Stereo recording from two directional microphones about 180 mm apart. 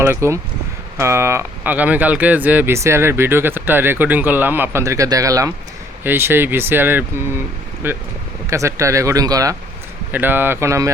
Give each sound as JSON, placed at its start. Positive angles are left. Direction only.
{"t": 0.0, "sound": "speech", "side_deg": -15}